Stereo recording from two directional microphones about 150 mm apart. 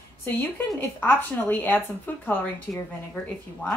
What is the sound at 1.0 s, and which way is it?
Speech, 10° left (ahead or behind).